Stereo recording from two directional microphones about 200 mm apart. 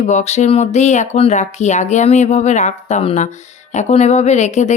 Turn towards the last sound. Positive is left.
turn(degrees=35)  # may be behind; listen again after turning